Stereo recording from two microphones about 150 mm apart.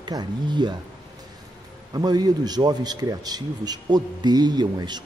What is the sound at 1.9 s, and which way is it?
A man's voice, 25° right (ahead or behind).